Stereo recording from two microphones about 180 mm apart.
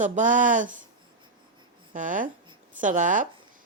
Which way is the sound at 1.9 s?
45° right (ahead or behind).